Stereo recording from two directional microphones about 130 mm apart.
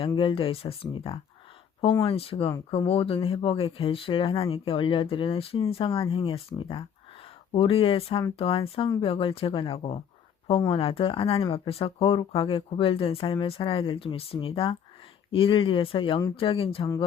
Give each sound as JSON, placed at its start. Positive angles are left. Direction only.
{"t": 0.0, "sound": "speech", "side_deg": 40}